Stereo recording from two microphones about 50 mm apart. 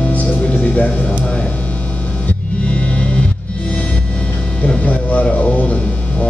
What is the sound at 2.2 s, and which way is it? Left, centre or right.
Music, left.